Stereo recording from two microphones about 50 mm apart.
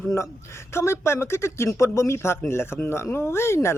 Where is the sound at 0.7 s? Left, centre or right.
Left.